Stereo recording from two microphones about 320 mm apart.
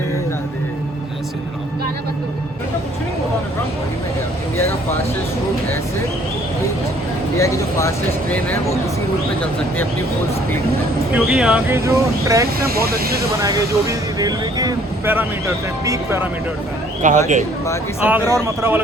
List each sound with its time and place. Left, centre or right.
7.3 s speech: centre
11.1 s speech: centre
12.5 s speech: right
13.4 s speech: centre
17.0 s speech: right
18.0 s speech: centre